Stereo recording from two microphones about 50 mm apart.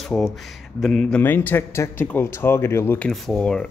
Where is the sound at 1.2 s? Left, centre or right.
Left.